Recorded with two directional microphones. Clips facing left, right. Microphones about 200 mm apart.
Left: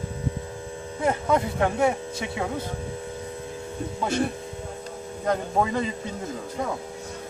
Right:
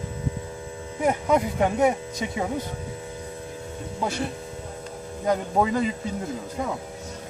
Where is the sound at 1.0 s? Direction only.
15° right (ahead or behind).